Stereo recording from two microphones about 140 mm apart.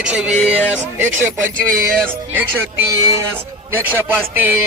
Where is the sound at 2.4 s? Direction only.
15° right (ahead or behind).